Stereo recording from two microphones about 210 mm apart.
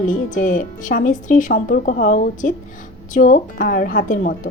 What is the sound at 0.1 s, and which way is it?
A woman's voice, 40° left (ahead or behind).